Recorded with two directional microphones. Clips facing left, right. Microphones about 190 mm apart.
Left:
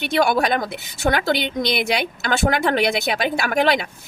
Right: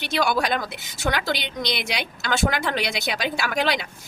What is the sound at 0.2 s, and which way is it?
Speech, 55° left (ahead or behind).